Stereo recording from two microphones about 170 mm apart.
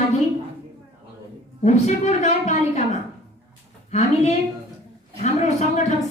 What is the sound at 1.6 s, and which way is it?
A woman's voice, 40° left (ahead or behind).